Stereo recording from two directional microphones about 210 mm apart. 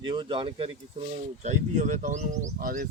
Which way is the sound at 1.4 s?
35° right (ahead or behind).